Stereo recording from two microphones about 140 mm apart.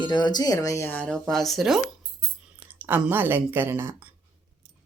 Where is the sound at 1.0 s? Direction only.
5° left (ahead or behind).